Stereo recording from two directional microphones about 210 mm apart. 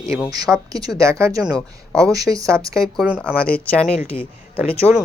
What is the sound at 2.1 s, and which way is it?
Speech, 15° right (ahead or behind).